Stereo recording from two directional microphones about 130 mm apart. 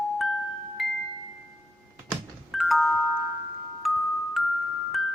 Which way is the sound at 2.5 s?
Centre (ahead or behind).